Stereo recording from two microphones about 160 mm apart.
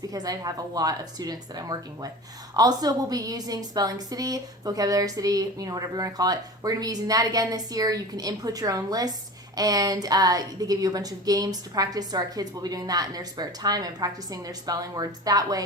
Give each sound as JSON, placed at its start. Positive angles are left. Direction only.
{"t": 0.1, "sound": "a woman's voice", "side_deg": -25}